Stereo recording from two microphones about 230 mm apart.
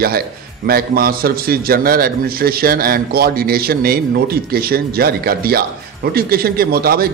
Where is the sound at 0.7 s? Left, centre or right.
Right.